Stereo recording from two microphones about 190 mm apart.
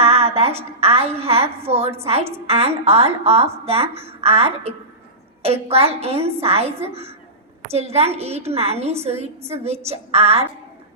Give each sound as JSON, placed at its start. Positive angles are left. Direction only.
{"t": 0.0, "sound": "a woman's voice", "side_deg": -30}